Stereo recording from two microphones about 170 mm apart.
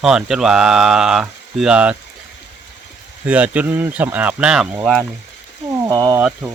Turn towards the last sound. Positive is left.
turn(degrees=-5)  # may be behind; listen again after turning